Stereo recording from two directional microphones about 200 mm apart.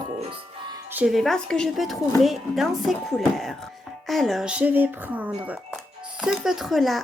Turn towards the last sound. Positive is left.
turn(degrees=0)  # may be behind; listen again after turning